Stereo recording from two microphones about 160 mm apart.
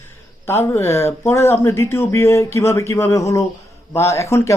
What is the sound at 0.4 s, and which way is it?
Speech, 15° left (ahead or behind).